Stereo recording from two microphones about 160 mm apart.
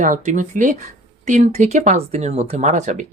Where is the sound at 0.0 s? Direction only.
55° right (ahead or behind).